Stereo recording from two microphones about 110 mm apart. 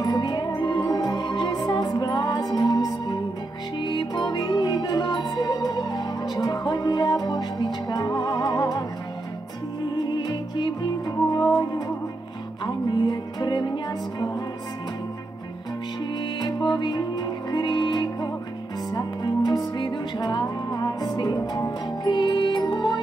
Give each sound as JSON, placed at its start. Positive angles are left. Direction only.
{"t": 0.0, "sound": "music", "side_deg": 40}
{"t": 10.1, "sound": "music", "side_deg": 40}
{"t": 12.6, "sound": "music", "side_deg": 40}
{"t": 16.3, "sound": "music", "side_deg": 45}